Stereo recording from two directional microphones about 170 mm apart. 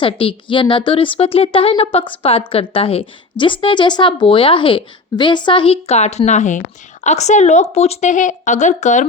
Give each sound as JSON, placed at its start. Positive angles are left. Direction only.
{"t": 0.0, "sound": "speech", "side_deg": 30}